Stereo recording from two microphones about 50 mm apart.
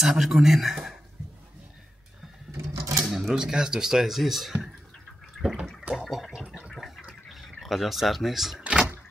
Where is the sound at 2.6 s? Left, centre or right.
Right.